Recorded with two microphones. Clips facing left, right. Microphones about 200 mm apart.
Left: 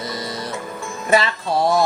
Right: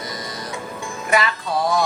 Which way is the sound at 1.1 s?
30° left (ahead or behind).